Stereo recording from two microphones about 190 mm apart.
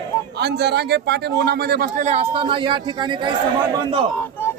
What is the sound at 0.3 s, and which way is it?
A man's voice, 60° right (ahead or behind).